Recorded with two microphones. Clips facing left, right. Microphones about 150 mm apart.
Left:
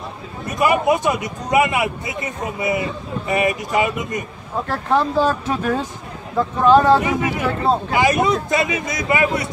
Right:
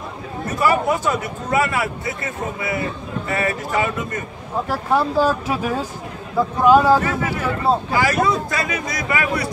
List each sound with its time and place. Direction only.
0.5 s a man's voice: 20° left (ahead or behind)
4.6 s speech: 10° right (ahead or behind)
7.0 s a man's voice: 15° left (ahead or behind)